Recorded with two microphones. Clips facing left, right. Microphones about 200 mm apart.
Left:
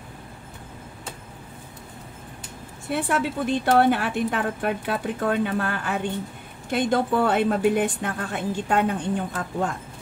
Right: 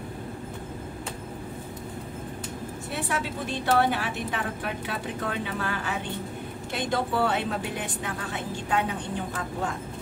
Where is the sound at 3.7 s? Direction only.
55° left (ahead or behind).